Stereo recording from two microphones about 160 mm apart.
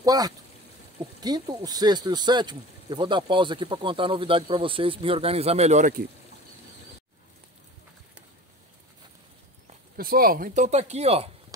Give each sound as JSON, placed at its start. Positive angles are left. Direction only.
{"t": 0.0, "sound": "speech", "side_deg": -25}
{"t": 9.9, "sound": "speech", "side_deg": -65}